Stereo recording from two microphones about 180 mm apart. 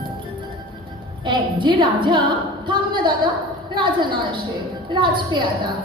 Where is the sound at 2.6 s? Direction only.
25° right (ahead or behind).